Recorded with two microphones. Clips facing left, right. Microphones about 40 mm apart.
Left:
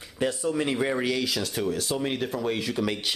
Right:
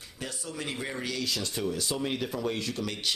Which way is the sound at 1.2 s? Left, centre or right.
Centre.